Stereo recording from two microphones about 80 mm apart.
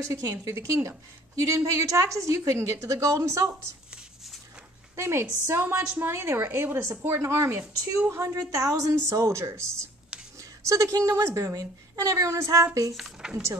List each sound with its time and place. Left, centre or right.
0.0 s a woman's voice: right
4.9 s a woman's voice: right
12.9 s speech: centre